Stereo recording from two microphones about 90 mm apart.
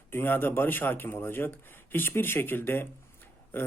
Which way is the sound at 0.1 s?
25° left (ahead or behind).